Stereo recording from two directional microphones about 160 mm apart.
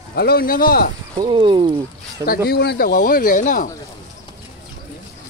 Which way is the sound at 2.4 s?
85° left.